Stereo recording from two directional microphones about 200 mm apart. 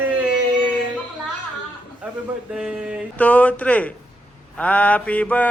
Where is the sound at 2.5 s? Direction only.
5° right (ahead or behind).